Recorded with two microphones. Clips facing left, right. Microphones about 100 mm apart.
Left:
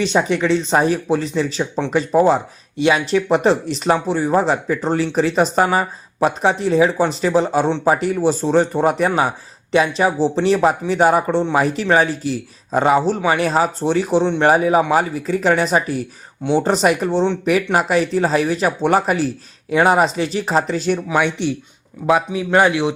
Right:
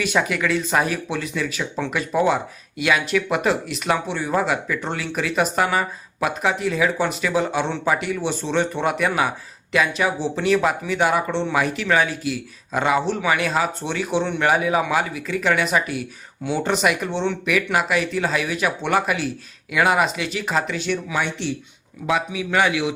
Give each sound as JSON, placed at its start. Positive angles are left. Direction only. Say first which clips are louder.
{"t": 0.0, "sound": "speech", "louder": "left 4 dB", "side_deg": 25}
{"t": 22.0, "sound": "speech", "louder": "left 6 dB", "side_deg": 40}